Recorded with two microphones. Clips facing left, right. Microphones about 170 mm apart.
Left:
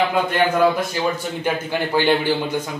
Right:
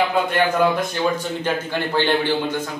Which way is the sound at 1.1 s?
10° left (ahead or behind).